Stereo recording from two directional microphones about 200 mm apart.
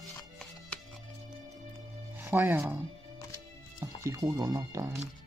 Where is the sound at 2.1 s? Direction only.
10° right (ahead or behind).